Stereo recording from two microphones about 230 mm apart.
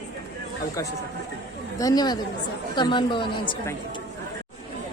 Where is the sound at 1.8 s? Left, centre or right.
Centre.